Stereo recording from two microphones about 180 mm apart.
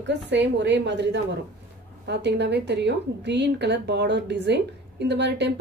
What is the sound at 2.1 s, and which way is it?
A woman's voice, 70° right (ahead or behind).